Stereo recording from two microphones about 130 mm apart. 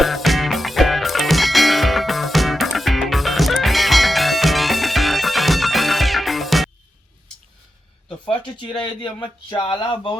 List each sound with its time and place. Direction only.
0.0 s music: centre (ahead or behind)
8.2 s a sound: 40° left (ahead or behind)
9.2 s speech: 40° left (ahead or behind)